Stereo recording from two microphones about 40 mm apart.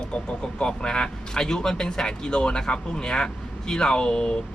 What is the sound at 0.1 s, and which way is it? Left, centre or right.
Speech, left.